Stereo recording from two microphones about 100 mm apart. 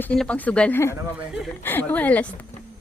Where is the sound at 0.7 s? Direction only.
25° left (ahead or behind).